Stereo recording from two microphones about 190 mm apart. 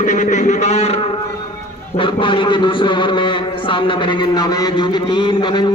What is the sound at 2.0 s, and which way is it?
A man's voice, 25° left (ahead or behind).